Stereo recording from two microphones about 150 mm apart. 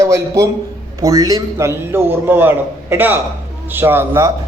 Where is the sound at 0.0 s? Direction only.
20° right (ahead or behind).